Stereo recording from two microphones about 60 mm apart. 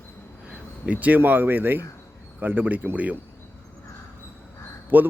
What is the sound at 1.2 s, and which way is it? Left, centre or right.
A man's voice, right.